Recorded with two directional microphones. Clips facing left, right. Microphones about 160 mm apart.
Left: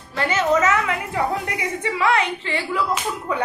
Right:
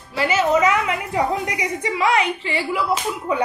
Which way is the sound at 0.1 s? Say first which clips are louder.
Right 1 dB; 5° right (ahead or behind).